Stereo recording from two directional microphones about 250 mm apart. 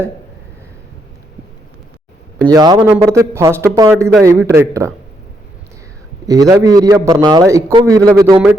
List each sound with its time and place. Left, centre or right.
2.5 s a man's voice: centre
6.2 s a man's voice: centre